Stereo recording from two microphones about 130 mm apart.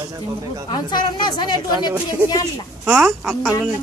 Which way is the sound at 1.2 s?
35° left (ahead or behind).